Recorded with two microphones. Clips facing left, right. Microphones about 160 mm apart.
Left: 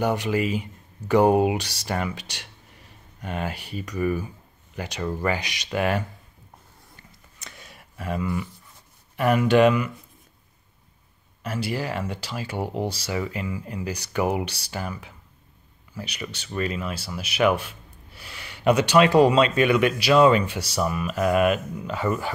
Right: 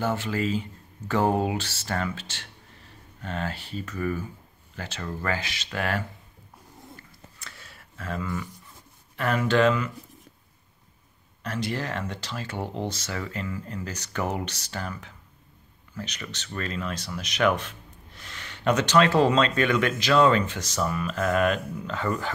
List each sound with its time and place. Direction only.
0.0 s speech: 15° left (ahead or behind)
7.0 s a sound: 20° left (ahead or behind)
9.1 s speech: 15° left (ahead or behind)
11.4 s speech: 10° left (ahead or behind)